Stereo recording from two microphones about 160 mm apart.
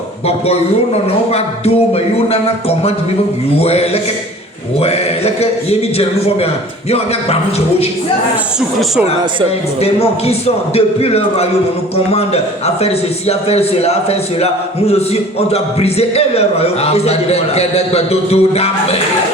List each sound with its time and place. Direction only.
1.3 s a man's voice: 40° left (ahead or behind)
9.8 s a man's voice: 40° left (ahead or behind)